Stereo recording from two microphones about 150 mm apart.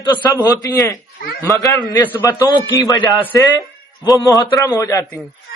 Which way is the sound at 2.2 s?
25° left (ahead or behind).